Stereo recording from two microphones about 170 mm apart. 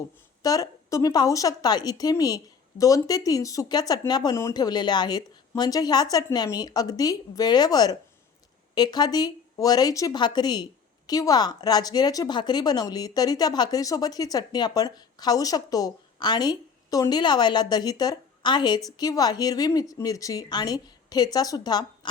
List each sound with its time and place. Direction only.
0.4 s speech: 20° left (ahead or behind)